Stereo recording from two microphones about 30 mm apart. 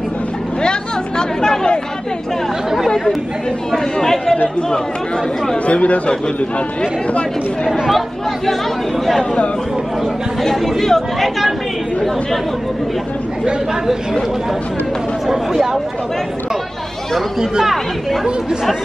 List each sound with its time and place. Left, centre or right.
0.6 s chatter: left
3.7 s speech: centre
5.7 s speech: left
7.7 s speech: centre
10.5 s speech: centre
15.2 s speech: centre